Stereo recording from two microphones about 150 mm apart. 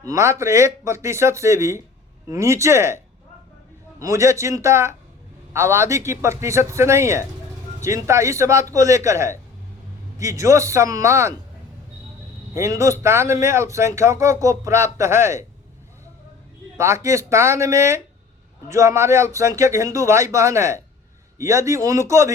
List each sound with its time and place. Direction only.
0.0 s speech: 20° right (ahead or behind)
4.0 s speech: 20° right (ahead or behind)
12.5 s speech: 20° right (ahead or behind)
16.7 s speech: 20° right (ahead or behind)